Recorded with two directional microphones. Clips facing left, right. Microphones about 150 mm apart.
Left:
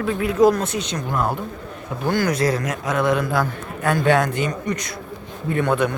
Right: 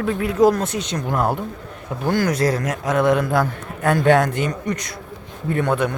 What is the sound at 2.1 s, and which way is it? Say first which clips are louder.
A man's voice: right 1 dB; 40° right (ahead or behind).